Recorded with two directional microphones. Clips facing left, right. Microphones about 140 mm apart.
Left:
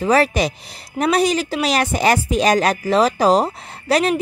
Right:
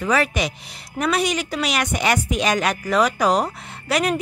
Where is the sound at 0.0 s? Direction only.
35° left (ahead or behind).